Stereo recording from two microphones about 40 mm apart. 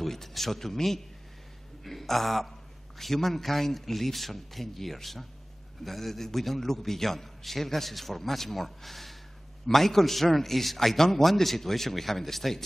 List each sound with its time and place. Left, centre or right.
0.0 s a man's voice: centre